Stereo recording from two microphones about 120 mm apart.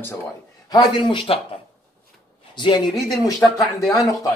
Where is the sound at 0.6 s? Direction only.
40° left (ahead or behind).